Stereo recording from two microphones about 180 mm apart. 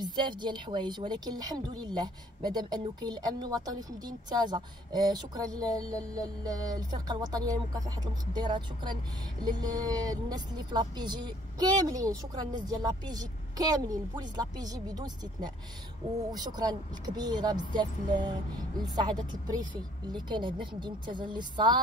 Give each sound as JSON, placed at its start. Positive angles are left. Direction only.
{"t": 0.0, "sound": "a woman's voice", "side_deg": -25}
{"t": 5.8, "sound": "music", "side_deg": 5}
{"t": 6.1, "sound": "a woman's voice", "side_deg": -20}